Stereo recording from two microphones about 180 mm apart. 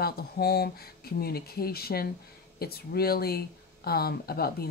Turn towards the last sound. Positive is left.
turn(degrees=60)  # may be behind; listen again after turning